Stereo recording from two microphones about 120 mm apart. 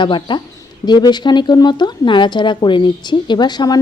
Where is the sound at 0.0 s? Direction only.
40° left (ahead or behind).